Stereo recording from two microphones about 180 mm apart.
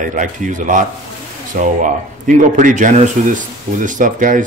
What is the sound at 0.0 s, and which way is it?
Speech, 45° right (ahead or behind).